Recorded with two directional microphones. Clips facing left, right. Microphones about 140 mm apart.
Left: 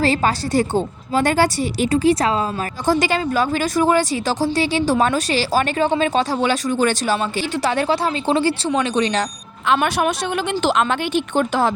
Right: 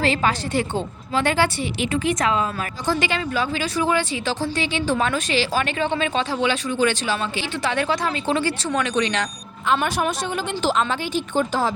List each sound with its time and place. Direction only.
0.0 s speech: 35° left (ahead or behind)
9.6 s a woman's voice: 75° left (ahead or behind)